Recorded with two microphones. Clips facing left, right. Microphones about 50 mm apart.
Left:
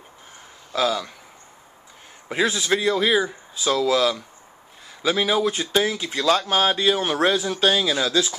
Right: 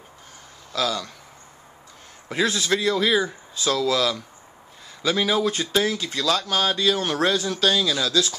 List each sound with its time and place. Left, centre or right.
0.7 s speech: centre
2.2 s speech: centre
6.2 s speech: left